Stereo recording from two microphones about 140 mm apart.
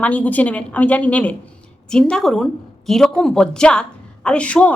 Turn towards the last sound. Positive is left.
turn(degrees=10)  # may be behind; listen again after turning